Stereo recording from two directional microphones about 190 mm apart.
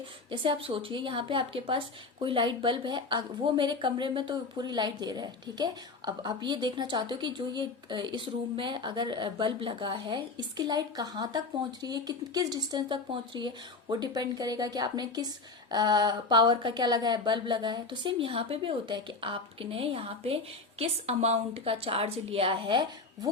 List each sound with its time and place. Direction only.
0.3 s a woman's voice: 25° right (ahead or behind)